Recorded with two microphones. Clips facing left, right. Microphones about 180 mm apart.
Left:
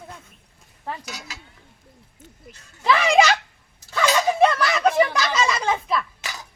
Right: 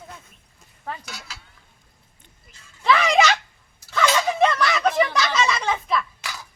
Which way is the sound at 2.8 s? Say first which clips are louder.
Left 1 dB; 5° left (ahead or behind).